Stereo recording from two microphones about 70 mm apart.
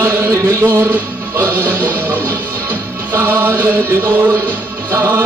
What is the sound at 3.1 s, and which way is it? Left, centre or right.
Chant, right.